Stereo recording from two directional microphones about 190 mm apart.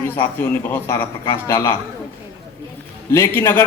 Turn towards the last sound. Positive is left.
turn(degrees=15)  # may be behind; listen again after turning